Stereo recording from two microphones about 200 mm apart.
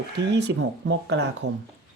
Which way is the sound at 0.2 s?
60° right (ahead or behind).